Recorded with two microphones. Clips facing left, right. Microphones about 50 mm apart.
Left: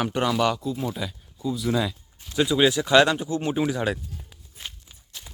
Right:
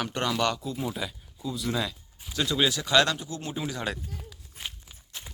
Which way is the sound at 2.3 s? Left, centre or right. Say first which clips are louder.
Left 6 dB; centre.